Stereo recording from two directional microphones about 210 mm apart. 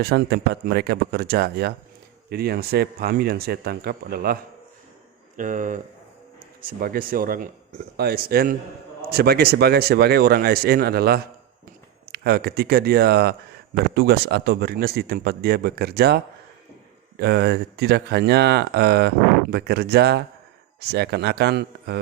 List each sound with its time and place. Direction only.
0.0 s speech: 50° right (ahead or behind)
5.4 s speech: 40° right (ahead or behind)